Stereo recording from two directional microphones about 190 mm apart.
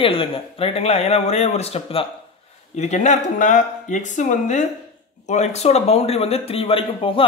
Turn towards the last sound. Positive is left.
turn(degrees=30)  # may be behind; listen again after turning